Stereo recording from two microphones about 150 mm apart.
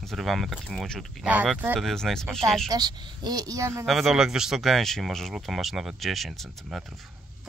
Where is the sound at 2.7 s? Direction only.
25° right (ahead or behind).